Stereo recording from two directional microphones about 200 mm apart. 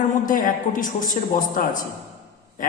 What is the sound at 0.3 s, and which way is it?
A woman's voice, 40° left (ahead or behind).